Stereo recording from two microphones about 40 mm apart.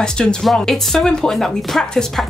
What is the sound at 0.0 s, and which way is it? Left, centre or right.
Speech, centre.